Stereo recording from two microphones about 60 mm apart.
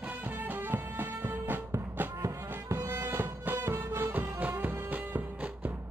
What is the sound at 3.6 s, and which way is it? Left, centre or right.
Music, right.